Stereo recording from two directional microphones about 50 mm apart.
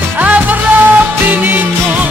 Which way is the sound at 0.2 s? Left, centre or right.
Right.